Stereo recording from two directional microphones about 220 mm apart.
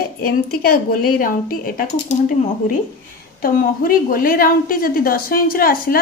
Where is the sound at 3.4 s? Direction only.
40° left (ahead or behind).